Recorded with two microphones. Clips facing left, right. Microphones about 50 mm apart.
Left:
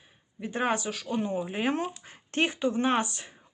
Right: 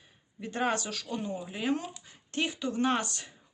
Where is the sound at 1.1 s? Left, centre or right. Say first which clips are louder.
Left 7 dB; left.